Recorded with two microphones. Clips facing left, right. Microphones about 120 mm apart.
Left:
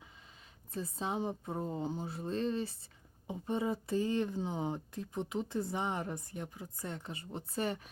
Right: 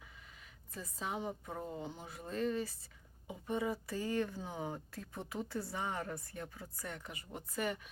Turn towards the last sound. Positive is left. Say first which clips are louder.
# left 2 dB
turn(degrees=30)  # may be behind; listen again after turning